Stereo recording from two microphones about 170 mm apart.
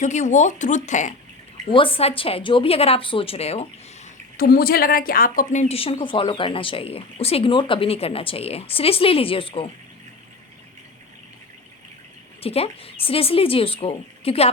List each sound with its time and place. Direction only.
0.0 s speech: 45° left (ahead or behind)
1.7 s a woman's voice: 30° left (ahead or behind)
4.4 s a woman's voice: 60° left (ahead or behind); by 9.6 s 30° left (ahead or behind)
12.4 s a woman's voice: 35° left (ahead or behind)